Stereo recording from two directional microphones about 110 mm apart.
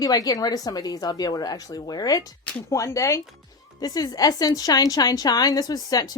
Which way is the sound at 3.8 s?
35° left (ahead or behind).